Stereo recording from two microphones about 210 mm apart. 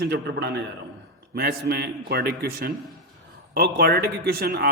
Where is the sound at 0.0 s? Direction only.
55° right (ahead or behind).